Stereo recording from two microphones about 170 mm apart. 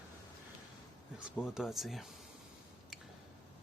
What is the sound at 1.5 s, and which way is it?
Speech, centre (ahead or behind).